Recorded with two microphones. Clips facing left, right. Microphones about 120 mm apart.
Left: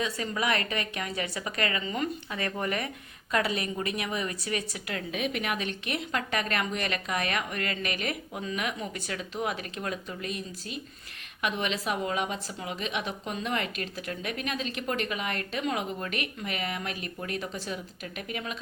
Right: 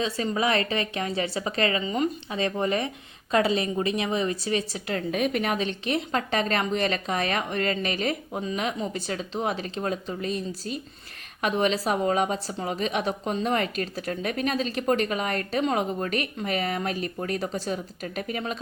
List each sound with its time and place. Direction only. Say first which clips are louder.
0.0 s a woman's voice: right 5 dB; 30° right (ahead or behind)
5.1 s speech: right 5 dB; 40° right (ahead or behind)